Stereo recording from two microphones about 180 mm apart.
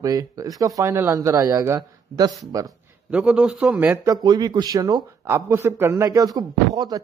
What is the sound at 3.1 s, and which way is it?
Speech, 5° right (ahead or behind).